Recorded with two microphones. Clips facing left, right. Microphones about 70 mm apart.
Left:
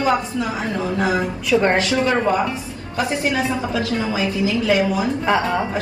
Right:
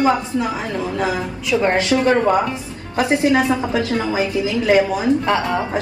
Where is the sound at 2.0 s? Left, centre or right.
Right.